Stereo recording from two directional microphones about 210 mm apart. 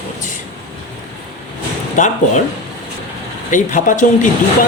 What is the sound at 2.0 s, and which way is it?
Speech, 35° left (ahead or behind).